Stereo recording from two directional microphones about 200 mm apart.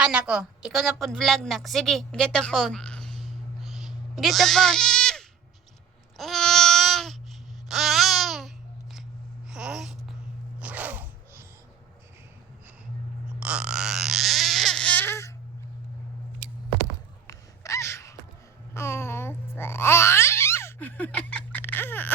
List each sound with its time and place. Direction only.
0.0 s a woman's voice: 5° right (ahead or behind)
6.1 s babbling: centre (ahead or behind)
9.5 s a sound: 5° right (ahead or behind)
13.4 s speech: 5° right (ahead or behind); by 15.3 s 10° left (ahead or behind)
17.2 s gasp: 15° left (ahead or behind)
18.7 s babbling: 10° left (ahead or behind)